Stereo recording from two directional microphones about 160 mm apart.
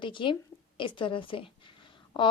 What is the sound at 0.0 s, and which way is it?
A woman's voice, 30° left (ahead or behind).